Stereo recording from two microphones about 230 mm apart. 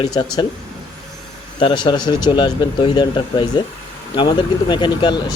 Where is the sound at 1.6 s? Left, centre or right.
Centre.